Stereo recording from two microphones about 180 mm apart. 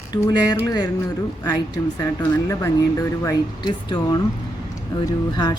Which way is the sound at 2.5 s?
15° left (ahead or behind).